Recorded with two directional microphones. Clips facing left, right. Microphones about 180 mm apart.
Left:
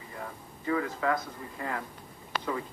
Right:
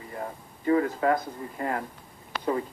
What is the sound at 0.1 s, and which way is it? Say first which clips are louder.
Speech: right 5 dB; 35° right (ahead or behind).